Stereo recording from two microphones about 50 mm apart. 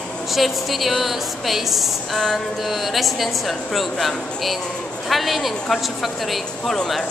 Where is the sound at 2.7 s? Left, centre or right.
Centre.